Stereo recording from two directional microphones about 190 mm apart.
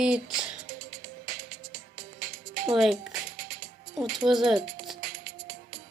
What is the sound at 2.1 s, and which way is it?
Music, 50° right (ahead or behind).